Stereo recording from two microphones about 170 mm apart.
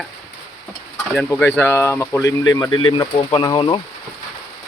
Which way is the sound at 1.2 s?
10° left (ahead or behind).